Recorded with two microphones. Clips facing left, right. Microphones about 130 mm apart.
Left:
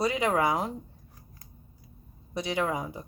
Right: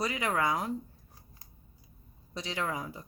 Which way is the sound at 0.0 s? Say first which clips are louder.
Left 5 dB; 20° left (ahead or behind).